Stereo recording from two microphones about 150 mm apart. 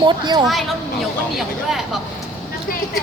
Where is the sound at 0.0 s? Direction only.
30° right (ahead or behind).